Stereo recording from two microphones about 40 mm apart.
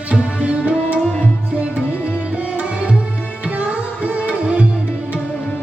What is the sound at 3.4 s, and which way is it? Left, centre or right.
Music, right.